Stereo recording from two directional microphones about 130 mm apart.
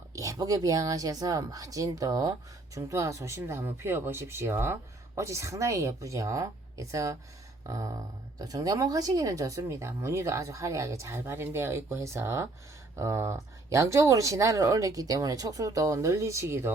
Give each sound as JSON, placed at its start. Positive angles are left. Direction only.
{"t": 0.2, "sound": "speech", "side_deg": -25}